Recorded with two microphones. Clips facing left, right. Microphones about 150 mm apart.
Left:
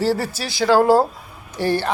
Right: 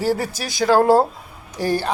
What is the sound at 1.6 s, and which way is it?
Speech, 40° right (ahead or behind).